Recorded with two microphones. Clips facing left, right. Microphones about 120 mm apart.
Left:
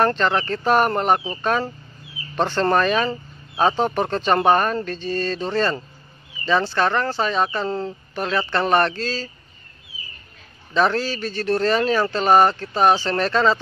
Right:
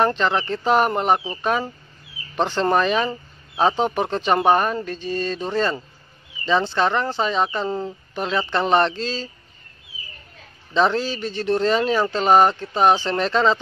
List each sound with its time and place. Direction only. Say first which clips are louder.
0.0 s speech: even; 15° right (ahead or behind)
10.7 s speech: even; 20° right (ahead or behind)